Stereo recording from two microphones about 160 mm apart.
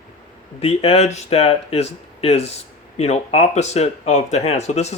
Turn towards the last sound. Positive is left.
turn(degrees=45)  # may be behind; listen again after turning